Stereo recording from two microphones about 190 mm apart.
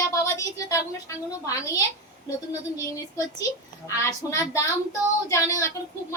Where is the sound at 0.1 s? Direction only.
15° left (ahead or behind).